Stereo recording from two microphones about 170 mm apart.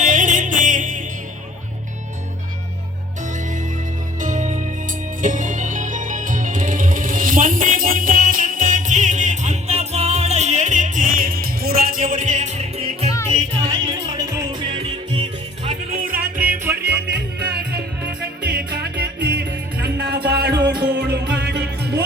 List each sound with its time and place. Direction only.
0.0 s music: 50° right (ahead or behind)
4.2 s music: 45° right (ahead or behind)
13.3 s music: 25° right (ahead or behind)
15.7 s music: 55° right (ahead or behind)
16.4 s music: 10° right (ahead or behind)
17.1 s music: 70° right (ahead or behind)